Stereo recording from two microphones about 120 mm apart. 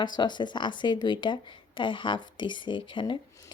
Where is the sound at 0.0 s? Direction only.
40° left (ahead or behind).